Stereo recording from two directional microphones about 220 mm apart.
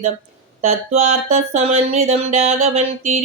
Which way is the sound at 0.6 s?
30° right (ahead or behind).